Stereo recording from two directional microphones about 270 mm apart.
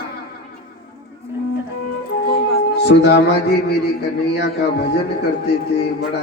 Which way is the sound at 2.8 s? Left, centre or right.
Left.